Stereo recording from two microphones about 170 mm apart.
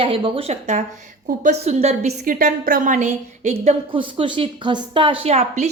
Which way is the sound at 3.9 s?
30° right (ahead or behind).